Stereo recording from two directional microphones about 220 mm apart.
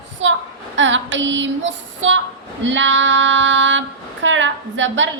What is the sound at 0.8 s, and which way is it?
Child singing, 60° right (ahead or behind).